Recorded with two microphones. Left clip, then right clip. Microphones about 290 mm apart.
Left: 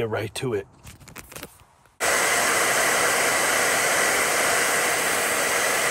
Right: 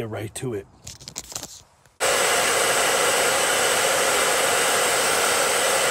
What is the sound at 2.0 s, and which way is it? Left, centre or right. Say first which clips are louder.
Hair dryer: right 1 dB; centre.